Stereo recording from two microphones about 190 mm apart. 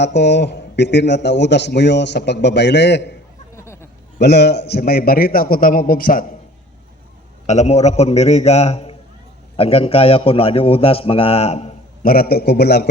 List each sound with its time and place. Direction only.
0.0 s a man's voice: 65° left (ahead or behind)
3.5 s chatter: 15° left (ahead or behind)
4.2 s a man's voice: 60° left (ahead or behind)
7.4 s a man's voice: 35° left (ahead or behind)
12.0 s a man's voice: 50° left (ahead or behind)